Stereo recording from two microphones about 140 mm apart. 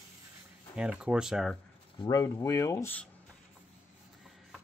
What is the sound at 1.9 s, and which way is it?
Speech, 30° left (ahead or behind).